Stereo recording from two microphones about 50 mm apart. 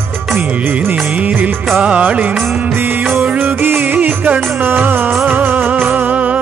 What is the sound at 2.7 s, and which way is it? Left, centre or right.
Music of bollywood, right.